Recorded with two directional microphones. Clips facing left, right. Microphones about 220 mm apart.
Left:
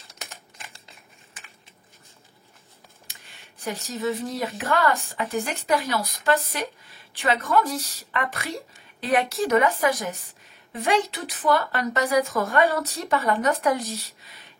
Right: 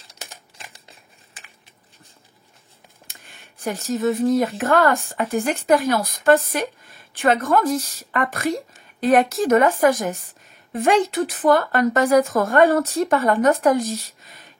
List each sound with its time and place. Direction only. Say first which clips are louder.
3.6 s speech: right 6 dB; 50° right (ahead or behind)